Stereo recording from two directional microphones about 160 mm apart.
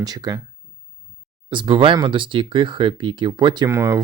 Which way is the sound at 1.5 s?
30° right (ahead or behind).